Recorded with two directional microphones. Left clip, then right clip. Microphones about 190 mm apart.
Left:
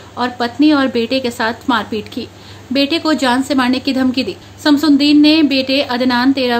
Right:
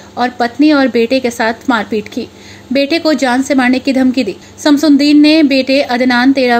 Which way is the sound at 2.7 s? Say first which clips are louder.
Right 3 dB; 20° right (ahead or behind).